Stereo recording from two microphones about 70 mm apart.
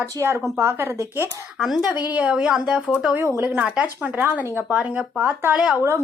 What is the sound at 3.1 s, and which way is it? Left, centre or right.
Speech, right.